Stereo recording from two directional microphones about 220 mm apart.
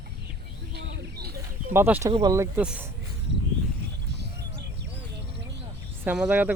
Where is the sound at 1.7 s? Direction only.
10° right (ahead or behind).